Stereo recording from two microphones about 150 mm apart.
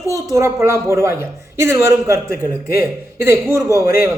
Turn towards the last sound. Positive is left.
turn(degrees=-20)  # may be behind; listen again after turning